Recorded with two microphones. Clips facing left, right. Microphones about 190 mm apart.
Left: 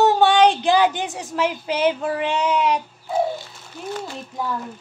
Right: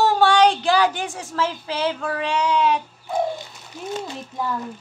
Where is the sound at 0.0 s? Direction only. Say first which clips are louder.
Left 1 dB; 20° left (ahead or behind).